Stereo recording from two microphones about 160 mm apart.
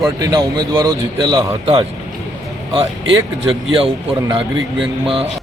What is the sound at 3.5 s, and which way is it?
Speech, 30° right (ahead or behind).